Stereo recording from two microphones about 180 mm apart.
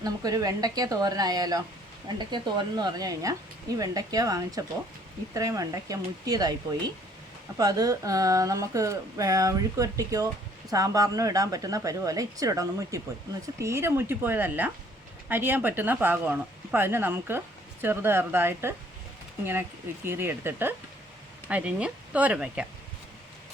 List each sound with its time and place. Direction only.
0.0 s speech: 20° right (ahead or behind)
20.1 s speech: 15° right (ahead or behind)